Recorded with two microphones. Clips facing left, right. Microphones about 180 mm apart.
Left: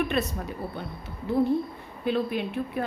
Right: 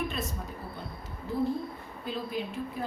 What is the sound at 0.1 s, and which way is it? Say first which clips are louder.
A woman's voice: left 8 dB; 70° left (ahead or behind).